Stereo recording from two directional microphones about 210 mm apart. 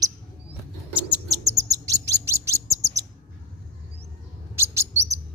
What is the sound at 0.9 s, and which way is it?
Bird, 10° right (ahead or behind).